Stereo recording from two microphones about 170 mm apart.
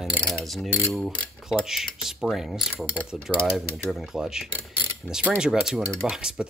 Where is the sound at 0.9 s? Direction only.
Centre (ahead or behind).